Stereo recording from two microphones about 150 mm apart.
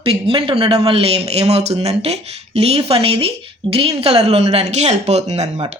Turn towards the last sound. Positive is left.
turn(degrees=-45)  # may be behind; listen again after turning